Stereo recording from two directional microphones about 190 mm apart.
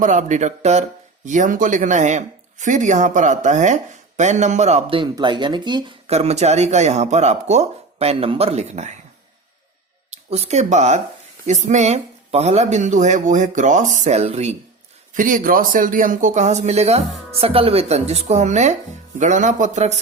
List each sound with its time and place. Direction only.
0.0 s speech: 40° right (ahead or behind)
10.1 s speech: 35° right (ahead or behind)